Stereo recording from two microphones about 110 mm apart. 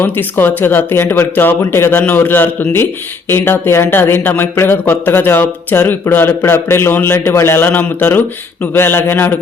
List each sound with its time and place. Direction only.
0.0 s speech: 20° left (ahead or behind)